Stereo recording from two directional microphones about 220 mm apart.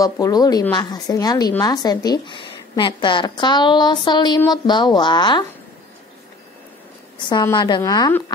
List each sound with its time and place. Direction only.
0.0 s a woman's voice: 15° left (ahead or behind)
7.2 s a woman's voice: 20° left (ahead or behind)